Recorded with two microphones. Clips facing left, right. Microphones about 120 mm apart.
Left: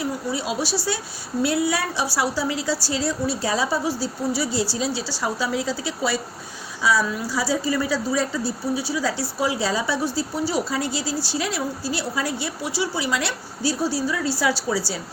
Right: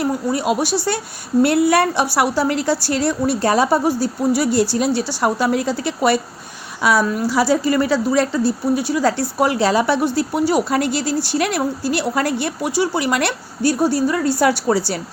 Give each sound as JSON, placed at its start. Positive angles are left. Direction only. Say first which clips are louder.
{"t": 0.0, "sound": "a woman's voice", "louder": "right 7 dB", "side_deg": -55}
{"t": 7.3, "sound": "a woman's voice", "louder": "right 7 dB", "side_deg": -70}